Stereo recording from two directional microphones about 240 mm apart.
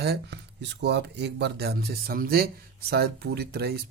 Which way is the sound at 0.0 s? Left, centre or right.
Right.